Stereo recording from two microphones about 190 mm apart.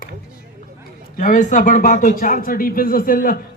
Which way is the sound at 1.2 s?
40° left (ahead or behind).